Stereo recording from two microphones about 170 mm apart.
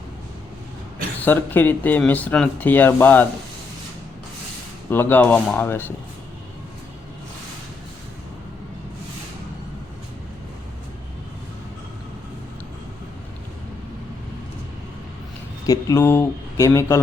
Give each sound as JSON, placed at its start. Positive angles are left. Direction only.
{"t": 1.2, "sound": "speech", "side_deg": 10}
{"t": 4.9, "sound": "speech", "side_deg": 10}
{"t": 15.6, "sound": "speech", "side_deg": 20}